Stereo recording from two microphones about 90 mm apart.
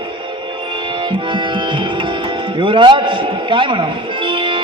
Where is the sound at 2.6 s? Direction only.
65° right (ahead or behind).